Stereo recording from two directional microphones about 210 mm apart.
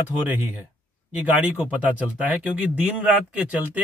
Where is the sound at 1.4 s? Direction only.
10° right (ahead or behind).